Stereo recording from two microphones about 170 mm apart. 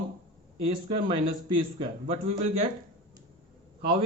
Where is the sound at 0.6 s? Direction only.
35° right (ahead or behind).